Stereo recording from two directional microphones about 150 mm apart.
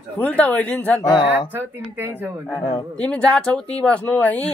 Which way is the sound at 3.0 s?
5° left (ahead or behind).